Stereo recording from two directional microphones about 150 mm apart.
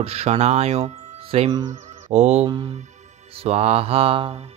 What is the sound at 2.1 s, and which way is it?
Speech, 45° right (ahead or behind).